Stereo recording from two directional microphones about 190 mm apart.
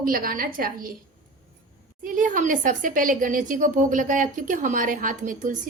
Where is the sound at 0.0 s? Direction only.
50° right (ahead or behind).